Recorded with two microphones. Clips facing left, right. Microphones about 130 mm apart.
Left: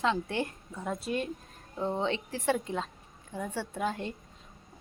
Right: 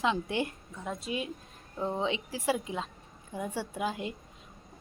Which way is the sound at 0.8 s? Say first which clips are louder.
Left 2 dB; centre (ahead or behind).